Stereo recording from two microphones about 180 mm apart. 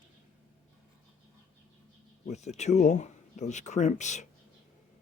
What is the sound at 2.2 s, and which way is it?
Speech, 40° left (ahead or behind).